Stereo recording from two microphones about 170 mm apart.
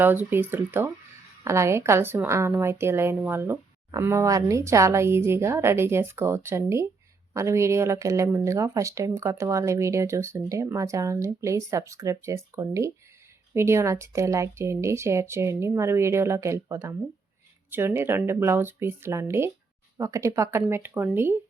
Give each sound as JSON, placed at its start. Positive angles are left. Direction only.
{"t": 0.0, "sound": "speech", "side_deg": -10}